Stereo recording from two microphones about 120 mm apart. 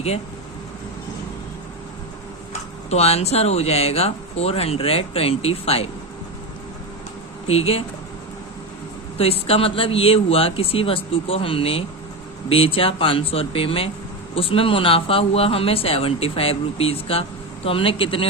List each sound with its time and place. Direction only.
2.5 s speech: 60° left (ahead or behind)
7.4 s speech: 55° left (ahead or behind)
9.1 s speech: 55° left (ahead or behind)